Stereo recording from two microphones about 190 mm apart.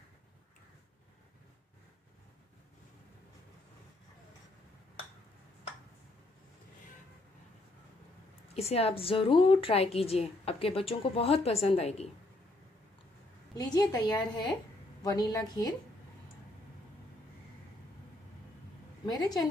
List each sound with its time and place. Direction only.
8.5 s a woman's voice: 30° left (ahead or behind)
13.7 s a woman's voice: 20° left (ahead or behind)
19.0 s a woman's voice: 20° left (ahead or behind)